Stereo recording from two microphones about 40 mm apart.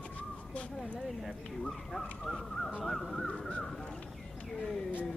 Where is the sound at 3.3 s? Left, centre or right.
Left.